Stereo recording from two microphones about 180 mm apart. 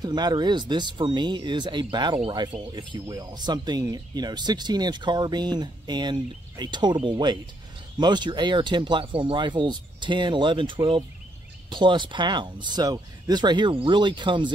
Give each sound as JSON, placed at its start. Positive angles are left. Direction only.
{"t": 0.0, "sound": "speech", "side_deg": -25}